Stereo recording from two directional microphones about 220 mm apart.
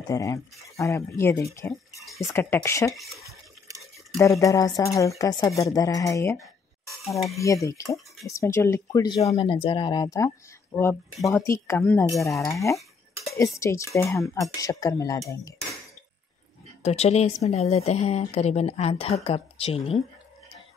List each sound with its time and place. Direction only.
0.1 s speech: 15° left (ahead or behind)
2.9 s speech: centre (ahead or behind)
4.2 s a woman's voice: 15° left (ahead or behind)
7.1 s speech: centre (ahead or behind)
7.3 s speech: 15° left (ahead or behind)
11.1 s speech: centre (ahead or behind)
11.4 s speech: 15° left (ahead or behind)
16.8 s a woman's voice: 30° left (ahead or behind)